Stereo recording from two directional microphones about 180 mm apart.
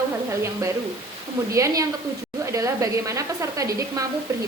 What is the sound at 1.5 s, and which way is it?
A woman's voice, 15° right (ahead or behind).